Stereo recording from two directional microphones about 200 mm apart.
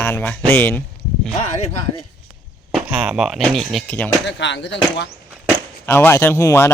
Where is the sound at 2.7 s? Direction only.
5° right (ahead or behind).